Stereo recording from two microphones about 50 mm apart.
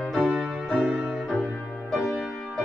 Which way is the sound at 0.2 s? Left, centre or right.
Right.